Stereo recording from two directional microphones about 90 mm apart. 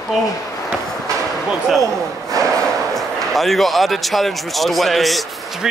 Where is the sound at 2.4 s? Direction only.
40° right (ahead or behind).